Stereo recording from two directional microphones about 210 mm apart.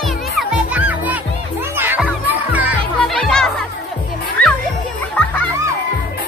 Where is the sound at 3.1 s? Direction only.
5° left (ahead or behind).